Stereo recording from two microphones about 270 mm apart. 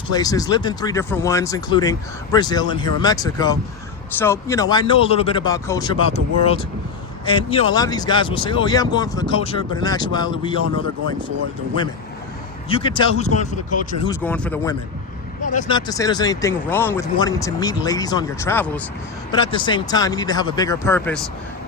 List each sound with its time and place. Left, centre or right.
0.1 s speech: centre
12.6 s speech: centre
14.1 s speech: centre